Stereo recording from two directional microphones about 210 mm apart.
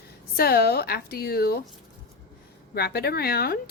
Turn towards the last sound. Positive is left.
turn(degrees=50)  # may be behind; listen again after turning